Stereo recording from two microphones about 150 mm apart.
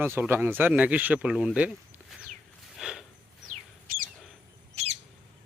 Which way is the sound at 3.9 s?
70° right (ahead or behind).